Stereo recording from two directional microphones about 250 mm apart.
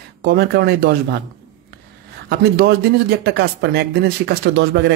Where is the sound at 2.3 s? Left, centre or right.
Right.